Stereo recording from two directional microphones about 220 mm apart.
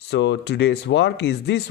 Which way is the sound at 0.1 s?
50° left (ahead or behind).